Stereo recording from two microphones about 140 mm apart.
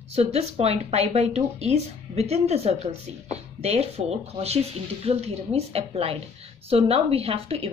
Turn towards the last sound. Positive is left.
turn(degrees=-45)  # may be behind; listen again after turning